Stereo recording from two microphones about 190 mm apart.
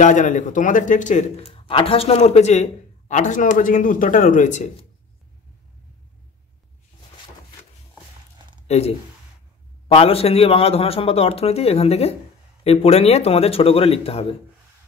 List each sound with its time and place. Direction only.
0.0 s speech: 40° left (ahead or behind)
8.6 s speech: 35° left (ahead or behind)